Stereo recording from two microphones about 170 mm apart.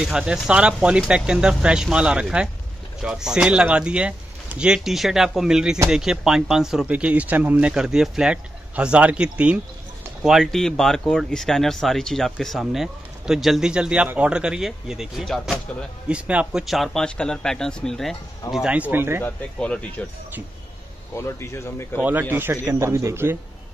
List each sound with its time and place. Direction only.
0.0 s speech: 5° right (ahead or behind)
19.2 s speech: 5° left (ahead or behind)
21.1 s speech: 15° left (ahead or behind)
22.3 s speech: 10° right (ahead or behind)